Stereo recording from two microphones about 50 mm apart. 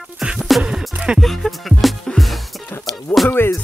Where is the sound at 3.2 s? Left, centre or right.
Left.